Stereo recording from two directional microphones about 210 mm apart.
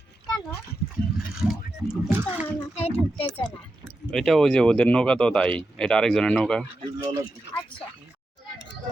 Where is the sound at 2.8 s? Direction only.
30° left (ahead or behind).